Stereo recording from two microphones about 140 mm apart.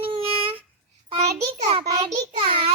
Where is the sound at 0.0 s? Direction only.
40° right (ahead or behind).